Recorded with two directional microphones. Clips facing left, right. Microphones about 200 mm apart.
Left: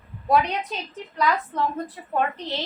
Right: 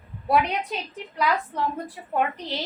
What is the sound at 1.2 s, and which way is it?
Speech, 10° right (ahead or behind).